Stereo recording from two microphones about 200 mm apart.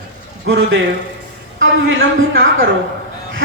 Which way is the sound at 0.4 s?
75° right (ahead or behind).